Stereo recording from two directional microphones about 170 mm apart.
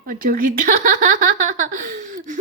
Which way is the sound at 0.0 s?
55° right (ahead or behind).